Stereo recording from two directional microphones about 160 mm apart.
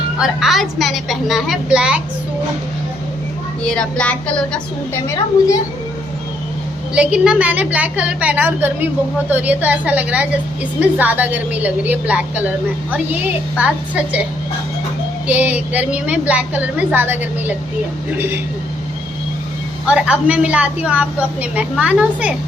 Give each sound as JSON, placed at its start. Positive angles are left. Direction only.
{"t": 0.2, "sound": "a woman's voice", "side_deg": -5}
{"t": 3.6, "sound": "speech", "side_deg": 5}
{"t": 5.0, "sound": "a woman's voice", "side_deg": 20}
{"t": 6.9, "sound": "a woman's voice", "side_deg": -5}
{"t": 15.3, "sound": "a woman's voice", "side_deg": -10}
{"t": 19.9, "sound": "a woman's voice", "side_deg": -10}